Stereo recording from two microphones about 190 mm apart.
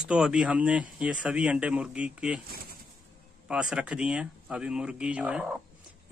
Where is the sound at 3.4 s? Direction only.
5° right (ahead or behind).